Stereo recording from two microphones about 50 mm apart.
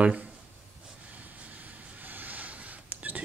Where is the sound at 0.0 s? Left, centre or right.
Right.